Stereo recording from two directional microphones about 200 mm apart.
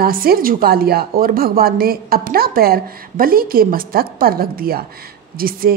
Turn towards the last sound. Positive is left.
turn(degrees=-45)  # may be behind; listen again after turning